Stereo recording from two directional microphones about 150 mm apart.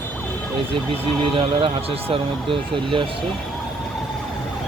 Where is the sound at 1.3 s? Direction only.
40° right (ahead or behind).